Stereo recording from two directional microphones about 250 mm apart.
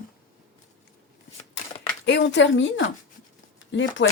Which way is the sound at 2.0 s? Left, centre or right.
Left.